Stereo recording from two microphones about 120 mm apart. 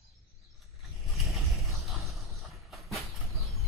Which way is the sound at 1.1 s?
Centre (ahead or behind).